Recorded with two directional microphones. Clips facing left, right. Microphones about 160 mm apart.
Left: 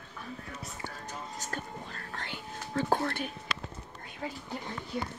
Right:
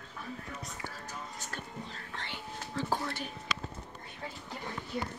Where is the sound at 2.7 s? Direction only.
55° left (ahead or behind).